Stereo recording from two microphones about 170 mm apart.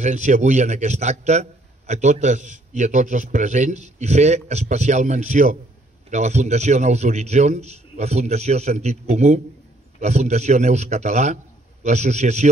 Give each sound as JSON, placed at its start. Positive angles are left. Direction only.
{"t": 0.0, "sound": "a man's voice", "side_deg": -45}